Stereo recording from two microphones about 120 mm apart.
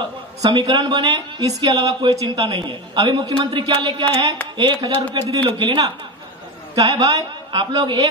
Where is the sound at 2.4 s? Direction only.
40° right (ahead or behind).